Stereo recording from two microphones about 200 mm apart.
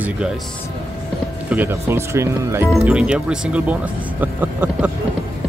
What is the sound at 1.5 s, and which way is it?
Speech, 10° right (ahead or behind).